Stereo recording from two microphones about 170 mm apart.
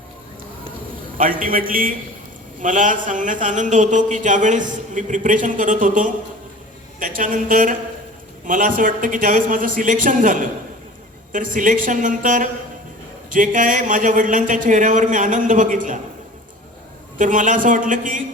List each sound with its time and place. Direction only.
1.2 s a man's voice: 55° right (ahead or behind)
17.2 s a man's voice: 50° right (ahead or behind)